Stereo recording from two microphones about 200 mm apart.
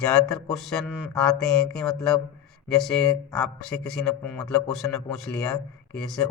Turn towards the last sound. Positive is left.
turn(degrees=0)  # may be behind; listen again after turning